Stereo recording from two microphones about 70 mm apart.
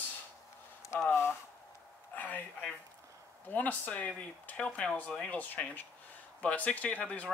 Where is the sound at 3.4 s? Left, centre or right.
Left.